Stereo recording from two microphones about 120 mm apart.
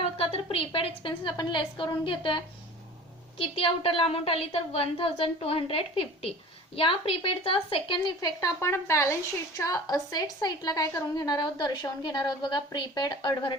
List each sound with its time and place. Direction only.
0.0 s a woman's voice: 55° left (ahead or behind); by 13.5 s 35° left (ahead or behind)